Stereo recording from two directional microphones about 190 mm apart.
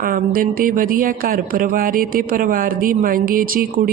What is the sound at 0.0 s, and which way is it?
Speech, 50° right (ahead or behind).